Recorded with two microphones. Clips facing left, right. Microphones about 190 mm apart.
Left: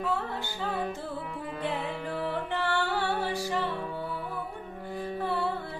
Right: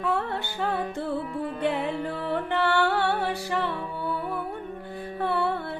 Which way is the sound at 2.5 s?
65° right (ahead or behind).